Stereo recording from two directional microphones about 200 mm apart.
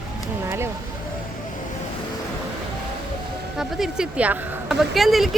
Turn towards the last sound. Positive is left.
turn(degrees=0)  # may be behind; listen again after turning